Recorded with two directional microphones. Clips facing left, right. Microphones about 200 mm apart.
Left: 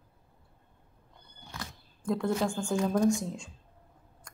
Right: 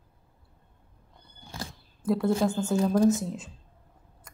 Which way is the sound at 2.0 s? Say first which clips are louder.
Right 4 dB; 5° right (ahead or behind).